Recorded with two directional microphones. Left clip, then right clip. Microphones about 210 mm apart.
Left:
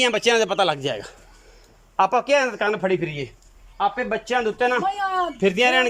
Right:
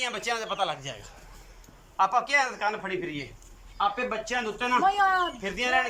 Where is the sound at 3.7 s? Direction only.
40° left (ahead or behind).